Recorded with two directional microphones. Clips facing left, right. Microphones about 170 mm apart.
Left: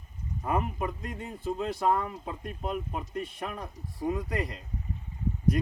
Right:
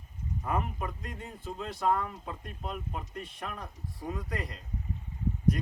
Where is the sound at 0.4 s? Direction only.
20° left (ahead or behind).